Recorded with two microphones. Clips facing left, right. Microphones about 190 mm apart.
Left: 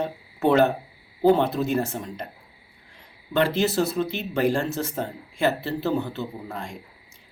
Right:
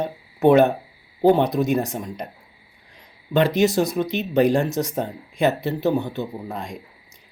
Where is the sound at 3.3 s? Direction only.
15° right (ahead or behind).